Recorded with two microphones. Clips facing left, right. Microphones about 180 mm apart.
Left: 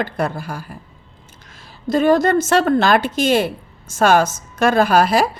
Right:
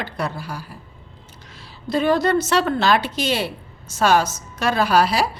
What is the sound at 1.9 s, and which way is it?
A woman's voice, 45° left (ahead or behind).